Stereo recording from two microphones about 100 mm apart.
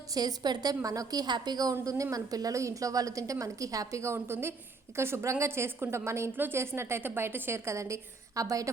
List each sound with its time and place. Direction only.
0.1 s a woman's voice: 40° right (ahead or behind)
1.7 s a woman's voice: 35° right (ahead or behind)